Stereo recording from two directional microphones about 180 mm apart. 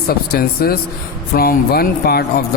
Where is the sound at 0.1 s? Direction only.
55° left (ahead or behind).